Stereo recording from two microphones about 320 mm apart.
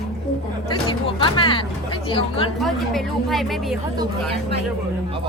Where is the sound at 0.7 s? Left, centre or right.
Centre.